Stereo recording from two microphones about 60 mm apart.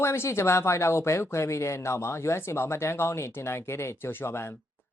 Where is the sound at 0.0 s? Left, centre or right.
Left.